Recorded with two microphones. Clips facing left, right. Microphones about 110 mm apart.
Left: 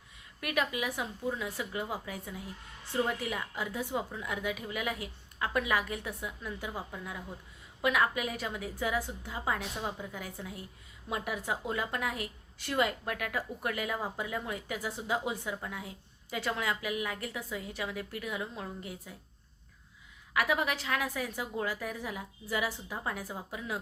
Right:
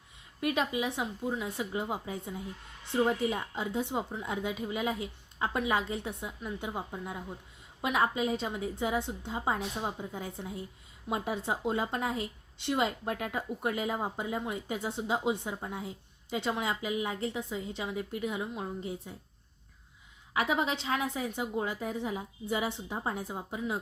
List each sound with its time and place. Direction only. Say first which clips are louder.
0.3 s a woman's voice: right 2 dB; 25° right (ahead or behind)
20.3 s a woman's voice: right 1 dB; 25° right (ahead or behind)